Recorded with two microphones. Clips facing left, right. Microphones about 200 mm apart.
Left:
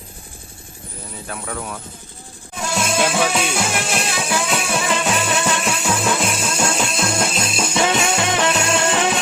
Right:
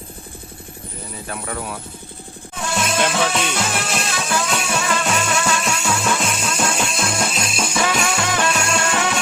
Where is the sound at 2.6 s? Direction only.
Centre (ahead or behind).